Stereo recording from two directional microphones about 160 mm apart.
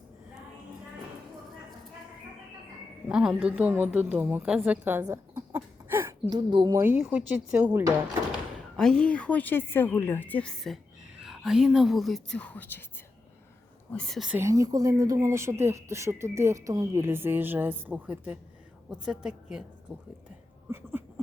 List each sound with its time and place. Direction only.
3.1 s a woman's voice: 5° right (ahead or behind)
6.3 s speech: 25° right (ahead or behind)
6.8 s speech: 10° right (ahead or behind)
8.7 s a woman's voice: 5° left (ahead or behind)
13.9 s a woman's voice: 5° left (ahead or behind)
14.3 s a woman's voice: 20° right (ahead or behind); by 19.6 s 5° right (ahead or behind)